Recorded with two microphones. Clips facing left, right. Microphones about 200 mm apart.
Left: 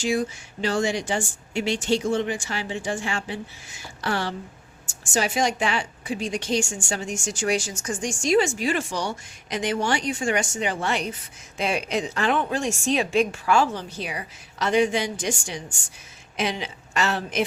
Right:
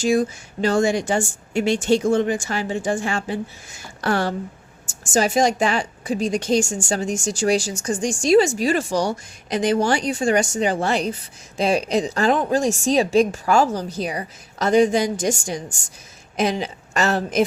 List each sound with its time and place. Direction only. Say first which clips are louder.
0.0 s a woman's voice: right 5 dB; 45° right (ahead or behind)